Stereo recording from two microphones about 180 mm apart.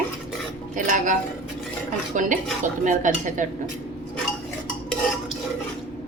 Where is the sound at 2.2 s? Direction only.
45° right (ahead or behind).